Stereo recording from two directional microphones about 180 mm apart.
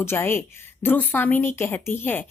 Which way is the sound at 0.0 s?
15° left (ahead or behind).